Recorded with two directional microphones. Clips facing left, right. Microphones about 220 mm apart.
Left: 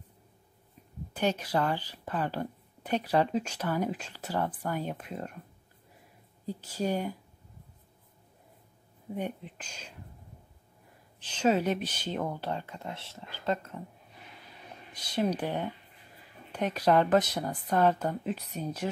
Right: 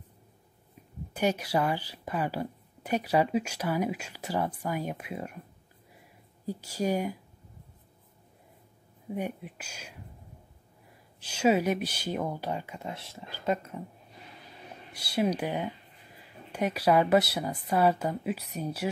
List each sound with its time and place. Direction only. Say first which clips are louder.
1.1 s a woman's voice: right 1 dB; 10° right (ahead or behind)
6.4 s a woman's voice: right 2 dB; 10° right (ahead or behind)
9.1 s a woman's voice: right 1 dB; 10° right (ahead or behind)
11.1 s a woman's voice: right 2 dB; 10° right (ahead or behind)
14.9 s a woman's voice: right 2 dB; 10° right (ahead or behind)